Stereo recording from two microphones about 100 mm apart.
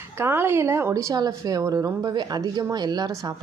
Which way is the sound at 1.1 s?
40° right (ahead or behind).